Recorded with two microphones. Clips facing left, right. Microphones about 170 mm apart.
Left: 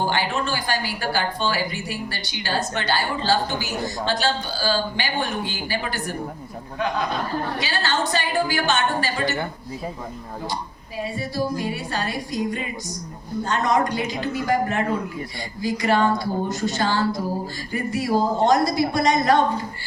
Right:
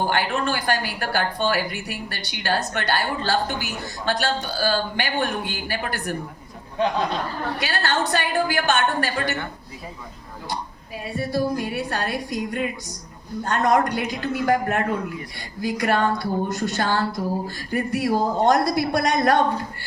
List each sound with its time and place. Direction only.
0.0 s speech: 55° right (ahead or behind)
7.6 s speech: 60° right (ahead or behind)
10.5 s speech: 60° right (ahead or behind)